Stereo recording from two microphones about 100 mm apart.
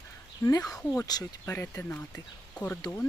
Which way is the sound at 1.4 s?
25° left (ahead or behind).